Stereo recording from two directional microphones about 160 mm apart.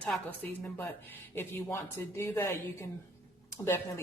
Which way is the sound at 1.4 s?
15° left (ahead or behind).